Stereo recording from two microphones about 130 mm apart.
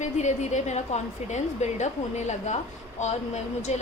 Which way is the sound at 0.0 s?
65° left (ahead or behind).